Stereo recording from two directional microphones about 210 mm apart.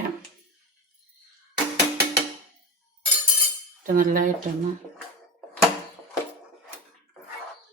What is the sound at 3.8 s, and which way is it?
Speech, 40° right (ahead or behind).